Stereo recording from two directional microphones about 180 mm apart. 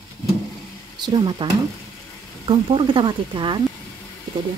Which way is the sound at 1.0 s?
25° right (ahead or behind).